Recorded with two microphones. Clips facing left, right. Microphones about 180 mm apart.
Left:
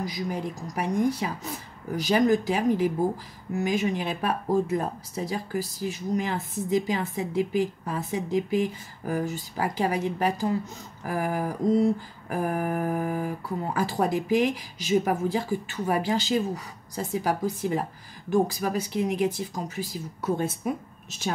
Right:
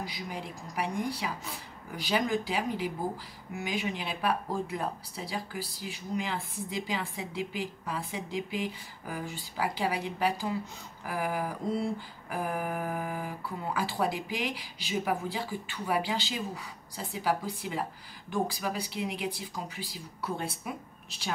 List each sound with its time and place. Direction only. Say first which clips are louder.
0.0 s speech: left 8 dB; 45° left (ahead or behind)